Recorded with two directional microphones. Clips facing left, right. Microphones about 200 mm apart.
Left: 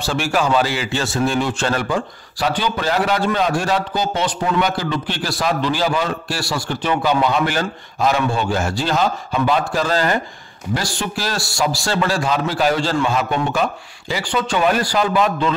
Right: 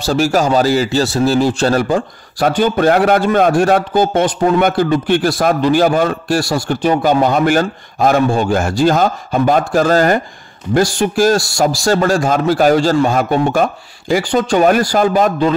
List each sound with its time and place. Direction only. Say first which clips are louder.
0.0 s speech: right 6 dB; 40° right (ahead or behind)